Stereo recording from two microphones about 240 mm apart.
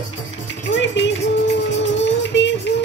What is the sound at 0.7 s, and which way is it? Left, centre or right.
Music, left.